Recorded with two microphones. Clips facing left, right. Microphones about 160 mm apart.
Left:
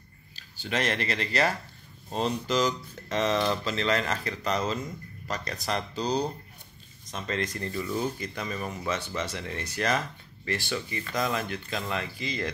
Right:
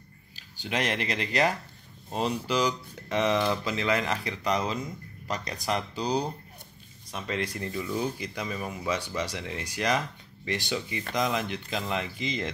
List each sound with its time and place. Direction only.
0.4 s speech: 15° right (ahead or behind)